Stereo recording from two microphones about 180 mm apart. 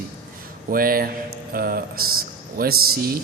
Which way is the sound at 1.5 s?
55° right (ahead or behind).